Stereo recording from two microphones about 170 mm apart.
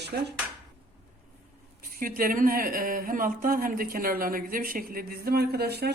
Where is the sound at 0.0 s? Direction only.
75° right (ahead or behind).